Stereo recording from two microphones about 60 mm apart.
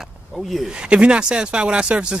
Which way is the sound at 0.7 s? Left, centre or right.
Centre.